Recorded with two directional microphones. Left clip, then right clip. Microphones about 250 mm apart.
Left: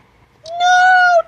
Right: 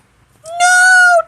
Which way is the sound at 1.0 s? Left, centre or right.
Right.